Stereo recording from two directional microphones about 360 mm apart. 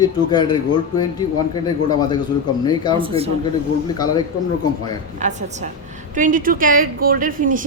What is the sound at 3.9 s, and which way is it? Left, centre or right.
Speech, centre.